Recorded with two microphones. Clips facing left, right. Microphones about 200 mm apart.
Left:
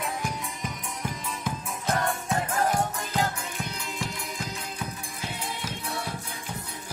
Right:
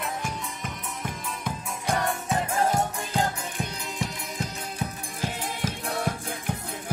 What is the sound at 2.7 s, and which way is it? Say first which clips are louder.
Music: right 1 dB; 25° right (ahead or behind).